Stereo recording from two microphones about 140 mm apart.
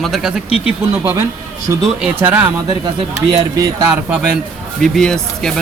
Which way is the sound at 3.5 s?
25° right (ahead or behind).